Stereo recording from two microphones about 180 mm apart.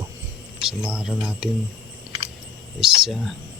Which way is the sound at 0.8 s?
5° right (ahead or behind).